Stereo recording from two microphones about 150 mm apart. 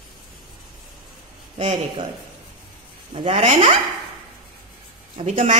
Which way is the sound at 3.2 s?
40° right (ahead or behind).